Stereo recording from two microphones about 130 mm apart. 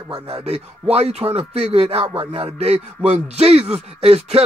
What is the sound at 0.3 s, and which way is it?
Speech, 55° right (ahead or behind).